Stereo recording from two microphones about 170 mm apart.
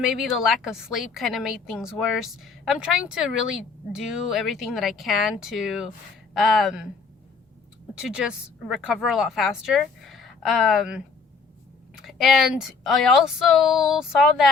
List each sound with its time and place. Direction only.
0.1 s a woman's voice: centre (ahead or behind)
8.0 s a woman's voice: 5° right (ahead or behind)
12.0 s a woman's voice: centre (ahead or behind)